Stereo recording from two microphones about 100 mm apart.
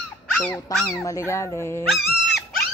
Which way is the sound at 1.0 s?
30° left (ahead or behind).